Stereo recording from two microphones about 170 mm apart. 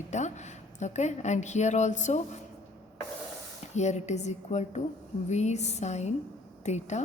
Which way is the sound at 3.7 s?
40° left (ahead or behind).